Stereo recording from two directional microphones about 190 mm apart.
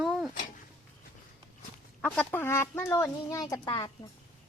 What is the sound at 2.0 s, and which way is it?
Speech, 10° left (ahead or behind).